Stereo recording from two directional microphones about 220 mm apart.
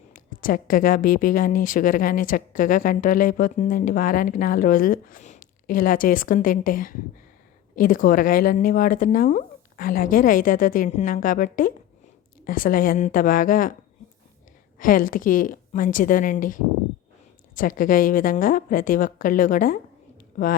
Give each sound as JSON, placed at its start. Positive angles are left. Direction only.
{"t": 0.1, "sound": "a woman's voice", "side_deg": 40}
{"t": 14.8, "sound": "a woman's voice", "side_deg": 40}